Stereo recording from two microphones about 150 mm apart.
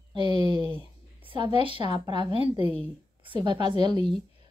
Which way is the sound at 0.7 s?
35° right (ahead or behind).